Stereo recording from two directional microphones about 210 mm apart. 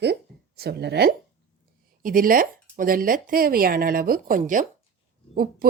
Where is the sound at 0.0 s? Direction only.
50° right (ahead or behind).